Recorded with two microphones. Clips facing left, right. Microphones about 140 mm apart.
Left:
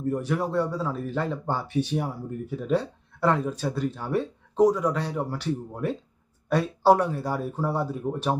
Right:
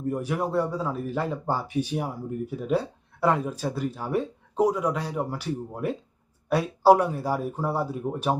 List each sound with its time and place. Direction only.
0.0 s speech: 10° right (ahead or behind)